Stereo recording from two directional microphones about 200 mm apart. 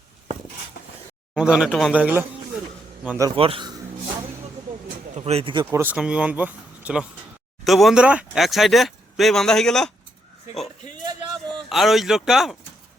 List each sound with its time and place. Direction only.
1.3 s a man's voice: 5° right (ahead or behind)
3.2 s a man's voice: 30° right (ahead or behind)
5.1 s speech: 30° right (ahead or behind)
5.7 s speech: 10° right (ahead or behind)
11.5 s speech: centre (ahead or behind)